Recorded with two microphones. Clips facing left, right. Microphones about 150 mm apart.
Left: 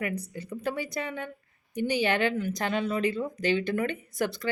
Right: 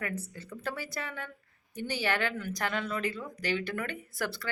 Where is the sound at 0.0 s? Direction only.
15° left (ahead or behind).